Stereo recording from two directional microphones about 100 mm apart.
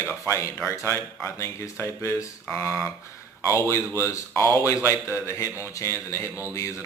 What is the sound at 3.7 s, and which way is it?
Speech, 25° left (ahead or behind).